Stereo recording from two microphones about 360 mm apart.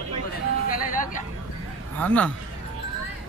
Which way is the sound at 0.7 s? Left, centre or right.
Left.